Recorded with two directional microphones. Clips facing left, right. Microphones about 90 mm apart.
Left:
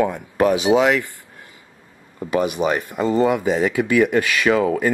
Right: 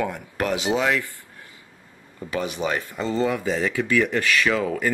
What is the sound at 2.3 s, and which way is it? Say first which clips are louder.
Speech: left 6 dB; 15° left (ahead or behind).